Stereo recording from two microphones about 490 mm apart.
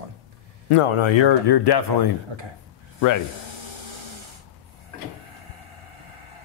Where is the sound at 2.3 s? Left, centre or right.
Right.